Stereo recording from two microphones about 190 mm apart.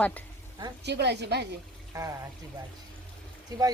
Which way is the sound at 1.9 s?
15° right (ahead or behind).